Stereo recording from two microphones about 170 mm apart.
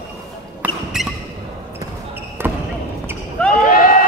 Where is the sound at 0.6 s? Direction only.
10° right (ahead or behind).